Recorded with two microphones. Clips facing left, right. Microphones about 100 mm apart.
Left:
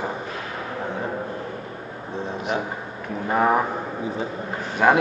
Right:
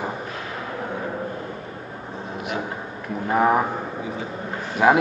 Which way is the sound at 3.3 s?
5° right (ahead or behind).